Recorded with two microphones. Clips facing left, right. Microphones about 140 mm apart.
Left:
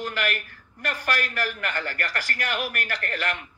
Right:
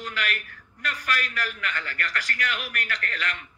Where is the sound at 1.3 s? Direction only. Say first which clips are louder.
Left 3 dB; 40° left (ahead or behind).